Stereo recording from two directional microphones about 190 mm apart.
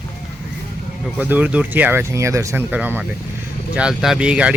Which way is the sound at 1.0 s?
10° right (ahead or behind).